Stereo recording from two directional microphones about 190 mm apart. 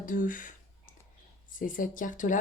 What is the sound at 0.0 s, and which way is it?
Speech, 45° left (ahead or behind).